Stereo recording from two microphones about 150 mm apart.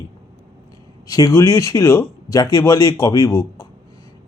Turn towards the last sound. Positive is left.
turn(degrees=20)  # may be behind; listen again after turning